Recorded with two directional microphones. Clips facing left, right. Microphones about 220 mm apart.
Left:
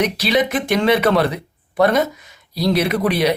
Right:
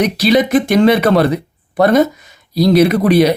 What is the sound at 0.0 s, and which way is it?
Speech, 40° right (ahead or behind).